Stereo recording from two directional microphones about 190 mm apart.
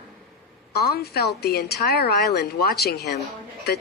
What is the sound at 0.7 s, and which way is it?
A woman's voice, 55° left (ahead or behind).